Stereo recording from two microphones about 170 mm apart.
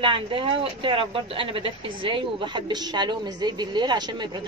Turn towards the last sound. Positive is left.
turn(degrees=-25)  # may be behind; listen again after turning